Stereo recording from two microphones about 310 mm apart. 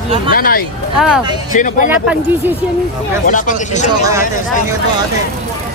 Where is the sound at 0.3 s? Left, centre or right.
Left.